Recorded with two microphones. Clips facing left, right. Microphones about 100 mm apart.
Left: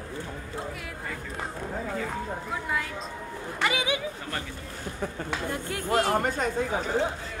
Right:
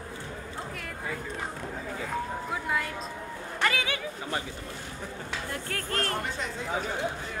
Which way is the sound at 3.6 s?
15° left (ahead or behind).